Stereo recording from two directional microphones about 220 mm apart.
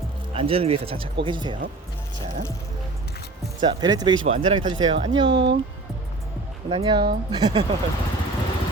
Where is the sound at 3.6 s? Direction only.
20° right (ahead or behind).